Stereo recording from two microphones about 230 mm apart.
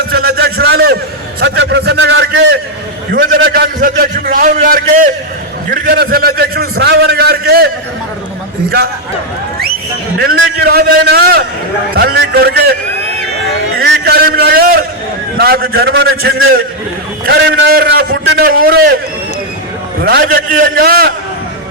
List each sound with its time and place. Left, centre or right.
0.1 s a sound: right
1.4 s a man's voice: right
10.2 s a man's voice: right
13.7 s a sound: right
15.4 s a man's voice: right
17.2 s a man's voice: right
20.1 s a man's voice: right